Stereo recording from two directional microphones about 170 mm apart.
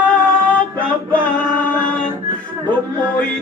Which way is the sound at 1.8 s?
5° left (ahead or behind).